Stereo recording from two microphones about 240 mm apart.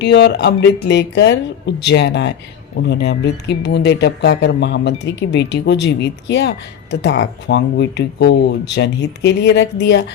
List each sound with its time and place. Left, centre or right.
0.0 s speech: left